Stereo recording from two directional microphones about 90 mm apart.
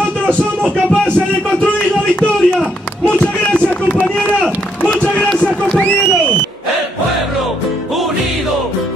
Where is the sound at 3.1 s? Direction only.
10° left (ahead or behind).